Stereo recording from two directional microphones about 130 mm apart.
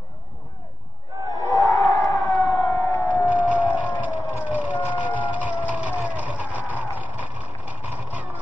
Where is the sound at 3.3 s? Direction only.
10° right (ahead or behind).